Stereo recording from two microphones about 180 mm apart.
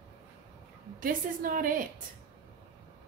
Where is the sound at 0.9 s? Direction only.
50° right (ahead or behind).